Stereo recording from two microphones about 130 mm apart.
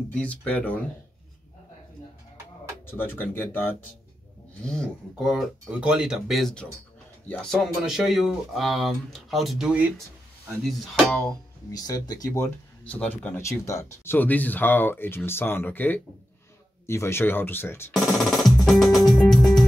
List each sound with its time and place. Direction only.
0.1 s speech: 10° left (ahead or behind)
2.9 s speech: 15° left (ahead or behind)
4.6 s speech: centre (ahead or behind)
7.6 s speech: 5° right (ahead or behind)
11.7 s speech: 30° left (ahead or behind)
12.3 s speech: 10° left (ahead or behind)
17.9 s music: centre (ahead or behind)